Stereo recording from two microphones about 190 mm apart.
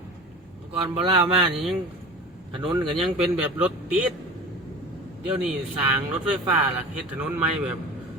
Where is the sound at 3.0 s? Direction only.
5° right (ahead or behind).